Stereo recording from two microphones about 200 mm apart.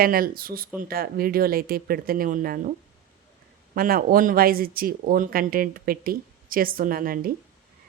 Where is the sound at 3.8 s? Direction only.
45° right (ahead or behind).